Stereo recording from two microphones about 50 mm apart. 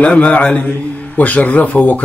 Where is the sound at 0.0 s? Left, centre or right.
Left.